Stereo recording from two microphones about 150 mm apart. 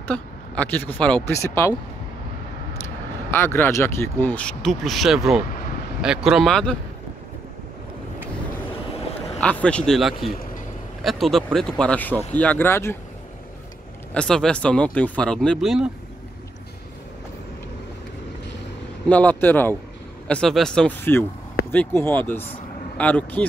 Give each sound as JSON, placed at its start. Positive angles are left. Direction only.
{"t": 0.1, "sound": "speech", "side_deg": 10}
{"t": 1.3, "sound": "speech", "side_deg": 20}
{"t": 3.3, "sound": "speech", "side_deg": 15}
{"t": 9.4, "sound": "speech", "side_deg": 10}
{"t": 14.1, "sound": "speech", "side_deg": 5}
{"t": 19.0, "sound": "speech", "side_deg": 10}
{"t": 21.0, "sound": "speech", "side_deg": 15}